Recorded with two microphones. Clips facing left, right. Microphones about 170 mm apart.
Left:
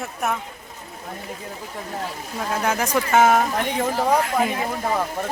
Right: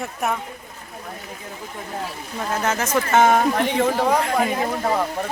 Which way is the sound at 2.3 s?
10° left (ahead or behind).